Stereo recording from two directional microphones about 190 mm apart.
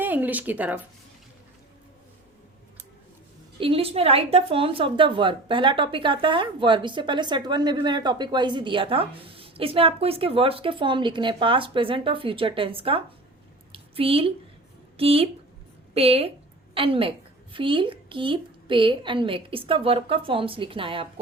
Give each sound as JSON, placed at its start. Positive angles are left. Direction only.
{"t": 0.0, "sound": "speech", "side_deg": -10}
{"t": 3.6, "sound": "a woman's voice", "side_deg": -30}
{"t": 13.7, "sound": "a sound", "side_deg": -30}
{"t": 14.9, "sound": "a woman's voice", "side_deg": -30}